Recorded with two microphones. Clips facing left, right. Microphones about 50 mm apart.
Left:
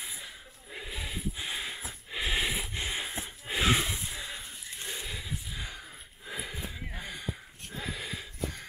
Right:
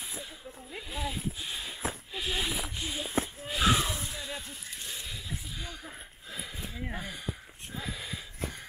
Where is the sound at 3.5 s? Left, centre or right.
Left.